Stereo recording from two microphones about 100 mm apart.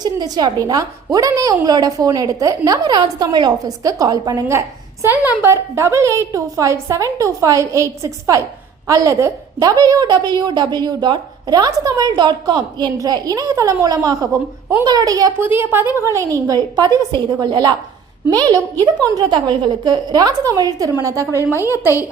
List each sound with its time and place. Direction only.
0.0 s a woman's voice: 45° right (ahead or behind)
5.0 s a woman's voice: 20° right (ahead or behind); by 15.3 s 35° right (ahead or behind)
15.4 s a woman's voice: 20° right (ahead or behind)